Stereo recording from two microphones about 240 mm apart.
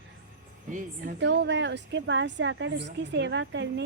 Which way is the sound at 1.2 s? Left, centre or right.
Right.